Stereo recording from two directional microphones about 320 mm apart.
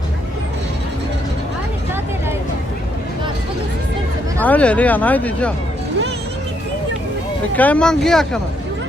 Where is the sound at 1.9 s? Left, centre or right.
Centre.